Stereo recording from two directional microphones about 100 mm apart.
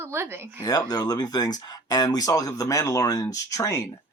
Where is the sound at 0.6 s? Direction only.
40° left (ahead or behind).